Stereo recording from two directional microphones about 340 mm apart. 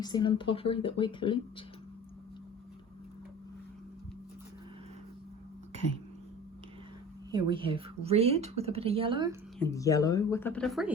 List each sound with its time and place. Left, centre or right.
0.0 s a woman's voice: centre
7.3 s a woman's voice: centre
9.6 s a woman's voice: centre